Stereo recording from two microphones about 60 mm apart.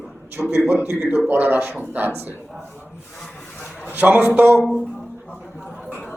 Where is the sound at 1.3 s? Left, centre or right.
Right.